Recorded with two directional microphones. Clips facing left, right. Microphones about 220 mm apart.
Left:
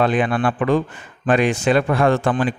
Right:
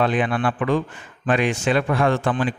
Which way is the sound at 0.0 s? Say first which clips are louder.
Left 2 dB; 45° left (ahead or behind).